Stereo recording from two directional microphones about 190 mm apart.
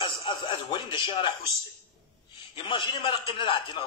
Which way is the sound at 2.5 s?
25° left (ahead or behind).